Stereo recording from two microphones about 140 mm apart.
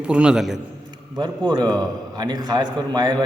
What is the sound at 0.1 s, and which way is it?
Speech, 5° right (ahead or behind).